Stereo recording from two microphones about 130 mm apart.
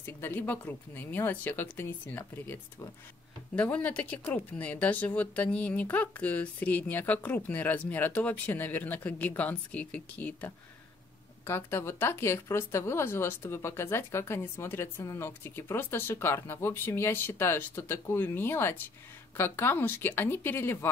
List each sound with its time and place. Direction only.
0.0 s speech: 15° left (ahead or behind)